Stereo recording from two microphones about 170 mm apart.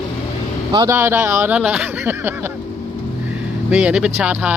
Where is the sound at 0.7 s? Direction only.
15° right (ahead or behind).